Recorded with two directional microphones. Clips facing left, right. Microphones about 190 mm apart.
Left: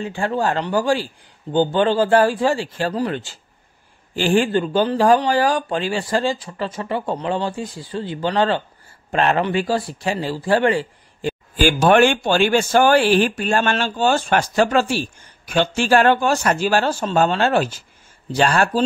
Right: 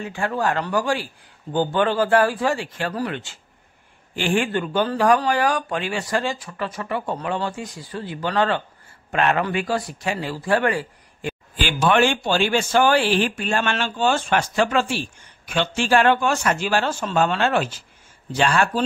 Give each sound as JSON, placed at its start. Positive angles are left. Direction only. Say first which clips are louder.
{"t": 0.0, "sound": "speech", "louder": "left 2 dB", "side_deg": 30}
{"t": 11.5, "sound": "speech", "louder": "left 5 dB", "side_deg": 45}